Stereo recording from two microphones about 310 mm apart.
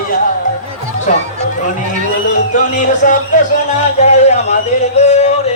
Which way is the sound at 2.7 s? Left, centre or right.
Left.